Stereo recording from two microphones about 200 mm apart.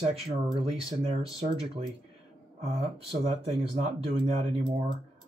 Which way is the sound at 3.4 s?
30° right (ahead or behind).